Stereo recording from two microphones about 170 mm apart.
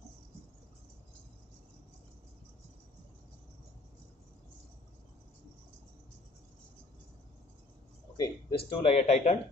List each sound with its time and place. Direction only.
8.2 s speech: 25° left (ahead or behind)